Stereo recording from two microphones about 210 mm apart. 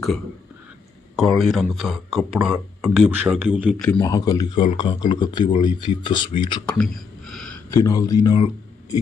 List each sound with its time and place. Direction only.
1.1 s speech: centre (ahead or behind)
3.8 s speech: 5° left (ahead or behind)
4.0 s speech: 15° left (ahead or behind)
6.7 s a sound: centre (ahead or behind)
7.7 s speech: 15° left (ahead or behind)